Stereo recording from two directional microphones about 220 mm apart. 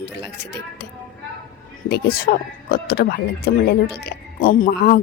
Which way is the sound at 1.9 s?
45° left (ahead or behind).